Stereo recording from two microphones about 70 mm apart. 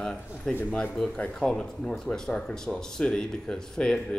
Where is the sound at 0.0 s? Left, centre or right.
Centre.